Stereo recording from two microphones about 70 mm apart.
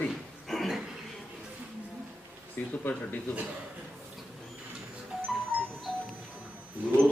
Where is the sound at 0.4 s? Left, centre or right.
Centre.